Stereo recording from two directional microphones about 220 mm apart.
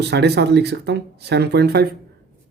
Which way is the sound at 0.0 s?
50° right (ahead or behind).